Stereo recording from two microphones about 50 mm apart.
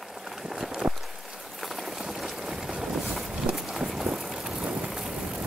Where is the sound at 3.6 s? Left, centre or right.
Centre.